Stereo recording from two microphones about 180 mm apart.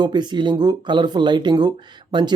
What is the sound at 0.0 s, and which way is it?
Speech, 25° right (ahead or behind).